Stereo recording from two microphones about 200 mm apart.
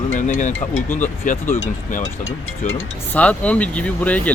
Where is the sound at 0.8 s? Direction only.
10° left (ahead or behind).